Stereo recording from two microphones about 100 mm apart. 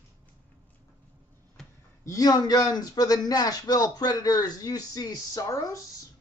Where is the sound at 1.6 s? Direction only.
Centre (ahead or behind).